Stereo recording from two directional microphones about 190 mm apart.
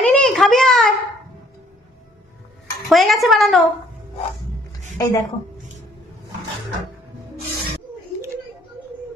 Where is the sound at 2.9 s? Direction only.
Centre (ahead or behind).